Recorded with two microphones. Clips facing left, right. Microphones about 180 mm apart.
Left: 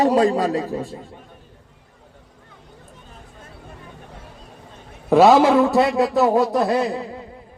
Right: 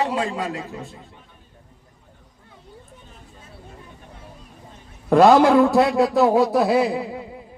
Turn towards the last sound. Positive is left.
turn(degrees=-10)  # may be behind; listen again after turning